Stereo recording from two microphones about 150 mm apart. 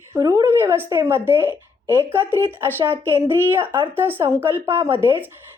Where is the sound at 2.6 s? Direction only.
15° right (ahead or behind).